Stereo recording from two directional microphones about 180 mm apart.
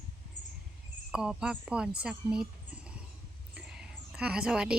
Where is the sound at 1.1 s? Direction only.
5° right (ahead or behind).